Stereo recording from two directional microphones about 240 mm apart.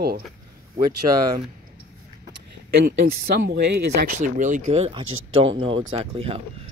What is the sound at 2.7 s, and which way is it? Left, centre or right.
Speech, right.